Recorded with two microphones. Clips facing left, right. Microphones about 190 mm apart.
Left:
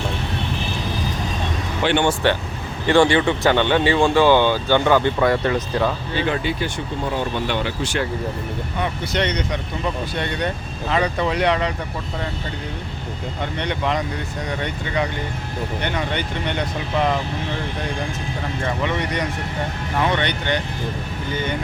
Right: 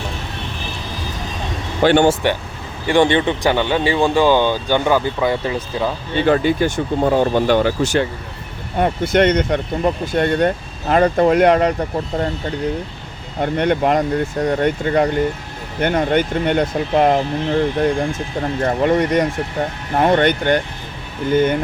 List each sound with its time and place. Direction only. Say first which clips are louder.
1.8 s speech: right 7 dB; 40° right (ahead or behind)
2.8 s speech: right 1 dB; 15° right (ahead or behind)
6.2 s speech: right 10 dB; 45° right (ahead or behind)
13.4 s speech: right 9 dB; 50° right (ahead or behind)
18.6 s speech: right 8 dB; 45° right (ahead or behind)